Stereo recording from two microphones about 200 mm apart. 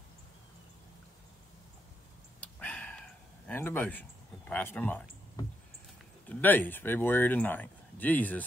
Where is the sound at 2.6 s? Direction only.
5° left (ahead or behind).